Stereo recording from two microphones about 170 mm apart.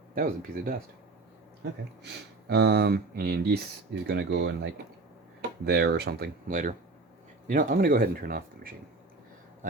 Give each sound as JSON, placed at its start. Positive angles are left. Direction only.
{"t": 0.1, "sound": "speech", "side_deg": -55}
{"t": 2.5, "sound": "speech", "side_deg": -70}
{"t": 4.0, "sound": "speech", "side_deg": -85}
{"t": 5.6, "sound": "speech", "side_deg": -70}
{"t": 7.4, "sound": "speech", "side_deg": -55}